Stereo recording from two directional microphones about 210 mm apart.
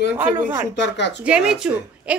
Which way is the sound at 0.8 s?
55° left (ahead or behind).